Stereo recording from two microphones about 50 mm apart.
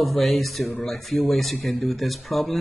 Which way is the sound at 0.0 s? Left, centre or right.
Centre.